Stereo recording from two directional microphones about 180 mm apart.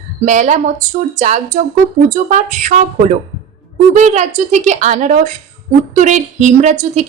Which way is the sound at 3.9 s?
40° right (ahead or behind).